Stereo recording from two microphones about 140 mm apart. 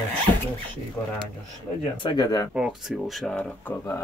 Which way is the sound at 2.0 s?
35° left (ahead or behind).